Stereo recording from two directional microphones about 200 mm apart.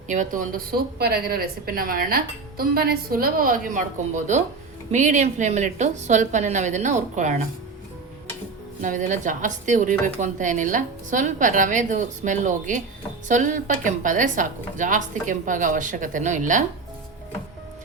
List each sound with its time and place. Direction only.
0.1 s a woman's voice: 40° right (ahead or behind)
8.8 s a woman's voice: 40° right (ahead or behind)